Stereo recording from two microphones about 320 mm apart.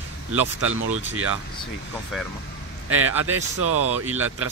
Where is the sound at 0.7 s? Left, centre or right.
Right.